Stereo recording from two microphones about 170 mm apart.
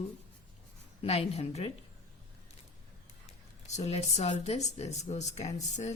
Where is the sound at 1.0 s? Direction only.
35° left (ahead or behind).